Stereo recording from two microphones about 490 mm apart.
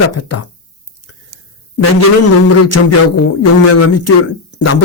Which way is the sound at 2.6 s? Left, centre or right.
Left.